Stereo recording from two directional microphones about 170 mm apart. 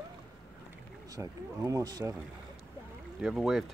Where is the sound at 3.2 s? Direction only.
5° right (ahead or behind).